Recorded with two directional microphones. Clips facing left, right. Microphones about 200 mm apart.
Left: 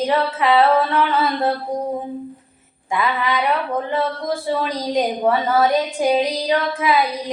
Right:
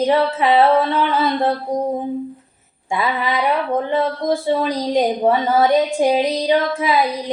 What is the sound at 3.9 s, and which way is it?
Speech, 25° right (ahead or behind).